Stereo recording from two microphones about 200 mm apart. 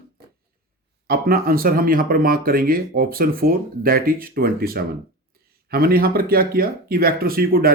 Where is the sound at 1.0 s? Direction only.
50° right (ahead or behind).